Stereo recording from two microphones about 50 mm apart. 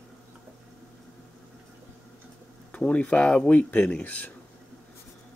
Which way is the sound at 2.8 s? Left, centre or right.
Left.